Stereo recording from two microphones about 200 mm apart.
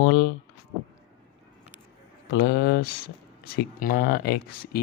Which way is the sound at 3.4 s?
45° left (ahead or behind).